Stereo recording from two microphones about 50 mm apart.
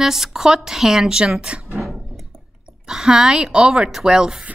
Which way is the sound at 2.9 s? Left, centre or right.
Centre.